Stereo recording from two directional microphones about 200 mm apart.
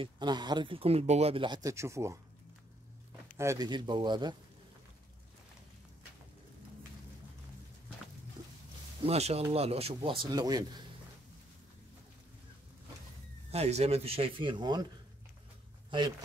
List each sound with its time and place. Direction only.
0.0 s speech: 20° right (ahead or behind)
3.3 s speech: 15° right (ahead or behind)
9.0 s speech: 30° right (ahead or behind)
13.5 s speech: 30° right (ahead or behind)